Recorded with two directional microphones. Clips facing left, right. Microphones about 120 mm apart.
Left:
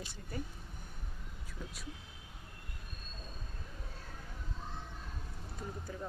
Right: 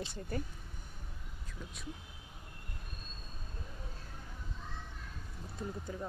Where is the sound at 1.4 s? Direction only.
5° left (ahead or behind).